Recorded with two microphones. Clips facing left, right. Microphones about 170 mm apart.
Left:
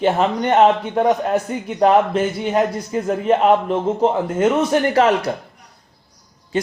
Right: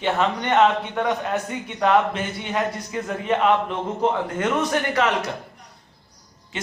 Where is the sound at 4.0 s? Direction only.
25° left (ahead or behind).